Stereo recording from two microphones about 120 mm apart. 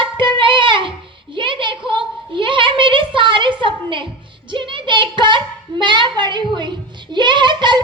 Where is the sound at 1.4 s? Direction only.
45° right (ahead or behind).